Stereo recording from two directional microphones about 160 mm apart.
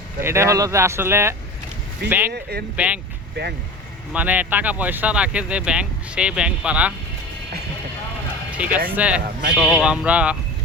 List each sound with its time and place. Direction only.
0.2 s speech: 15° right (ahead or behind)
2.3 s speech: 80° right
2.7 s speech: 10° right (ahead or behind)
3.4 s speech: 90° right
4.1 s speech: 10° right (ahead or behind)
8.6 s speech: 10° right (ahead or behind)